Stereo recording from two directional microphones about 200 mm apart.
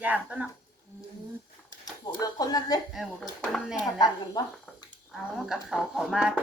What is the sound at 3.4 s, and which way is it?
Speech, centre (ahead or behind).